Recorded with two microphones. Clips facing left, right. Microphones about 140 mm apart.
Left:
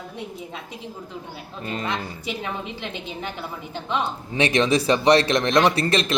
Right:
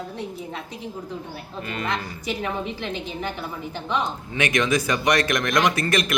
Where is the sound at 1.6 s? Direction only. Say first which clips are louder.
Left 1 dB; 25° left (ahead or behind).